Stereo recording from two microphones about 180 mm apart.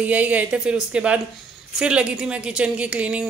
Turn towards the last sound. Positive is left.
turn(degrees=-5)  # may be behind; listen again after turning